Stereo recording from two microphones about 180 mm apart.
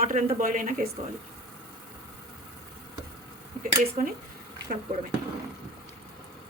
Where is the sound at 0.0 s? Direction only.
40° right (ahead or behind).